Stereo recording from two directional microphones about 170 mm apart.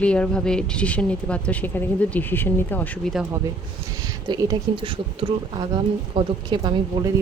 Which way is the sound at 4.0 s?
25° right (ahead or behind).